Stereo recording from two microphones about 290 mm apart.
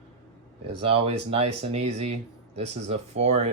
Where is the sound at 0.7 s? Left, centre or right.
Centre.